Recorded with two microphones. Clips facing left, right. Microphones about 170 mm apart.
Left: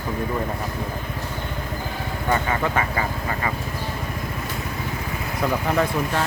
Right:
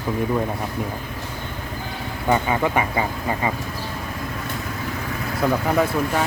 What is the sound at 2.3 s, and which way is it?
Speech, 15° right (ahead or behind).